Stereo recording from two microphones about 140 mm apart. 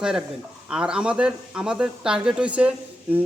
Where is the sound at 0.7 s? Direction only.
5° right (ahead or behind).